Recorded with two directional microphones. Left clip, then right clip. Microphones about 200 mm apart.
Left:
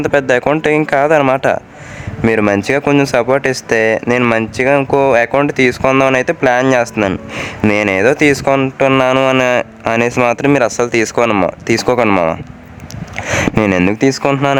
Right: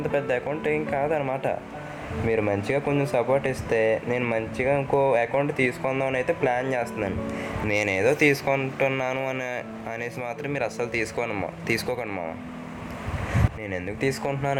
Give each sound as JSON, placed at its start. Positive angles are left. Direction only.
{"t": 0.0, "sound": "speech", "side_deg": 50}
{"t": 13.6, "sound": "speech", "side_deg": 45}